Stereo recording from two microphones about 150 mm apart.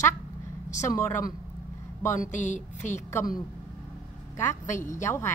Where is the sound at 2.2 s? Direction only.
55° left (ahead or behind).